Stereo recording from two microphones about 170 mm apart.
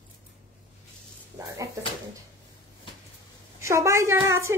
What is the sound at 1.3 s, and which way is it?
Speech, 20° right (ahead or behind).